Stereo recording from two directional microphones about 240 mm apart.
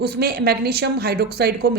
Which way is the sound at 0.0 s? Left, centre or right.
Right.